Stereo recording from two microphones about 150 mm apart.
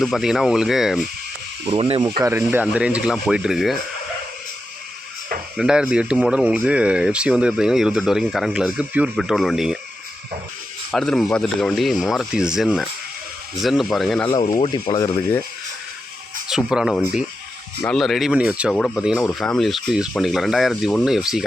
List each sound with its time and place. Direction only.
0.0 s speech: centre (ahead or behind)
1.6 s speech: 40° right (ahead or behind)
2.0 s speech: 25° right (ahead or behind)
2.3 s speech: 10° right (ahead or behind)
5.5 s speech: 5° right (ahead or behind)
10.9 s speech: centre (ahead or behind)
14.3 s speech: 30° left (ahead or behind)
16.5 s speech: 5° right (ahead or behind)